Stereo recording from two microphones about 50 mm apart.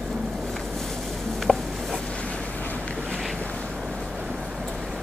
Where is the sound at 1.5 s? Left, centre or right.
Centre.